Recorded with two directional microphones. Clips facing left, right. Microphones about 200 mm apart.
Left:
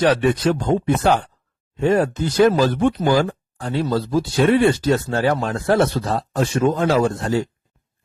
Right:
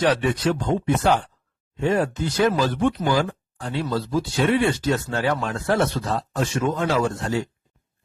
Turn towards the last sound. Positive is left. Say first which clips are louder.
# left 4 dB
turn(degrees=35)  # may be behind; listen again after turning